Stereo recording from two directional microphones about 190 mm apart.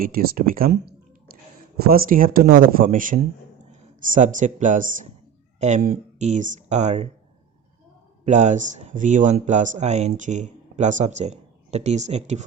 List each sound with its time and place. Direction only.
0.0 s speech: 50° right (ahead or behind)
8.2 s speech: 40° right (ahead or behind)